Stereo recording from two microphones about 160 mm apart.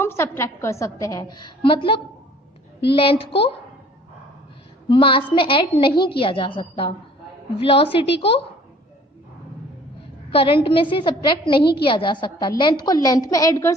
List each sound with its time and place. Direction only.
0.0 s a woman's voice: 15° left (ahead or behind); by 3.5 s 35° left (ahead or behind)
4.8 s a woman's voice: 30° left (ahead or behind)
10.3 s a woman's voice: 35° left (ahead or behind)